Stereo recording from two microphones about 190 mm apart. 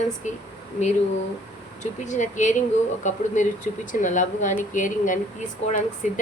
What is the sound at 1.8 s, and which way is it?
Speech, 40° left (ahead or behind).